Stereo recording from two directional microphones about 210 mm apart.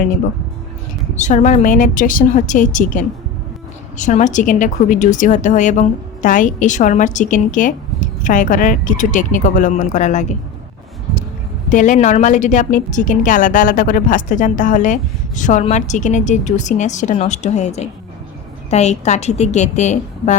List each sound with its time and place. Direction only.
1.1 s a woman's voice: 35° left (ahead or behind)
11.7 s a woman's voice: 40° left (ahead or behind)